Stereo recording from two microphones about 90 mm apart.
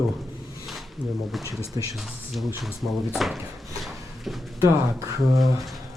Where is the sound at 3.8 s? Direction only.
Centre (ahead or behind).